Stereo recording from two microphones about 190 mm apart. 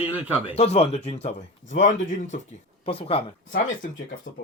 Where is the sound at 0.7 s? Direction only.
35° left (ahead or behind).